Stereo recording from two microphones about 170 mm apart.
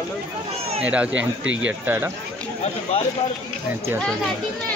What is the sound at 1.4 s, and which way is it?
Speech, 90° right.